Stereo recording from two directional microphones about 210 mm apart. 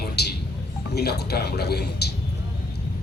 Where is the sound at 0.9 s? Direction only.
50° left (ahead or behind).